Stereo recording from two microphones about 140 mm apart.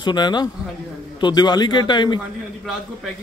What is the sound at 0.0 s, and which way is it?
A man's voice, 30° left (ahead or behind).